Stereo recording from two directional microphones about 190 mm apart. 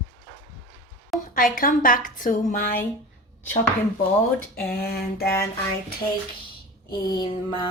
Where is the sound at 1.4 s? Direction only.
45° left (ahead or behind).